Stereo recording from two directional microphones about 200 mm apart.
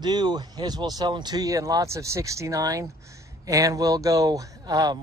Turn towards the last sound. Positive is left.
turn(degrees=-20)  # may be behind; listen again after turning